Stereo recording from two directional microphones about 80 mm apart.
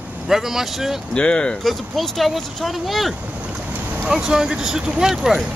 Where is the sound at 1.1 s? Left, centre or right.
Centre.